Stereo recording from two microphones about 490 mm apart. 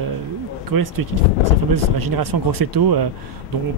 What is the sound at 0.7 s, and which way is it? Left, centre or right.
Speech, right.